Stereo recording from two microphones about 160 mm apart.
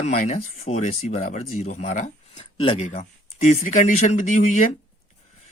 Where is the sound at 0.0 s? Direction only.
50° left (ahead or behind).